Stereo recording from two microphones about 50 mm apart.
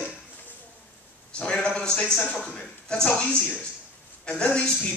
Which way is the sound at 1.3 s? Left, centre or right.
Centre.